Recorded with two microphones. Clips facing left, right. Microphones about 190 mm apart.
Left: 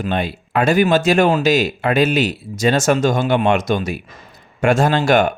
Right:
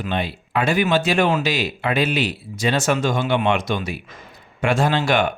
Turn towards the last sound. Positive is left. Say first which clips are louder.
# left 4 dB
turn(degrees=45)  # may be behind; listen again after turning